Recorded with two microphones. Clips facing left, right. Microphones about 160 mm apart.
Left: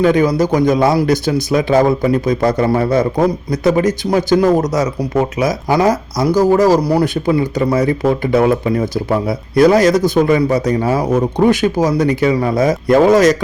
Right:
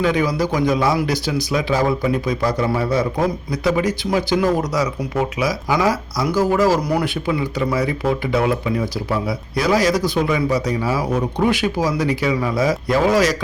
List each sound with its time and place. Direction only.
0.0 s speech: 45° left (ahead or behind)